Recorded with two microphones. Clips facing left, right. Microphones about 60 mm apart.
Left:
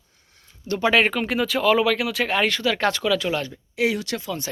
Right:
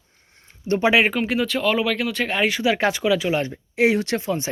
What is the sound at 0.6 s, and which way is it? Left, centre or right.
Speech, right.